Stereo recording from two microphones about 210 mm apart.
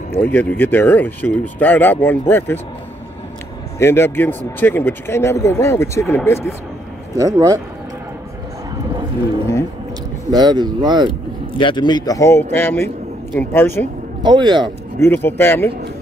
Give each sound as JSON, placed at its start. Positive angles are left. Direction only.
{"t": 0.1, "sound": "speech", "side_deg": 10}
{"t": 3.8, "sound": "speech", "side_deg": 10}
{"t": 7.2, "sound": "speech", "side_deg": -15}
{"t": 10.3, "sound": "speech", "side_deg": -20}
{"t": 11.5, "sound": "a man's voice", "side_deg": 25}
{"t": 14.2, "sound": "speech", "side_deg": -20}
{"t": 15.0, "sound": "speech", "side_deg": 10}